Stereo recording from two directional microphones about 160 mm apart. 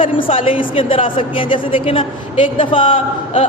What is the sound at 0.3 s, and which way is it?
A woman's voice, 35° left (ahead or behind).